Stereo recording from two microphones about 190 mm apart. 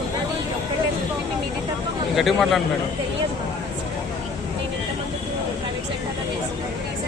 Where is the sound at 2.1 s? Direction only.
Centre (ahead or behind).